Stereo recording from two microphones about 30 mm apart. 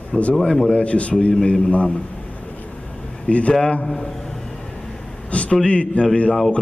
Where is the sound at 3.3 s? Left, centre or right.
Left.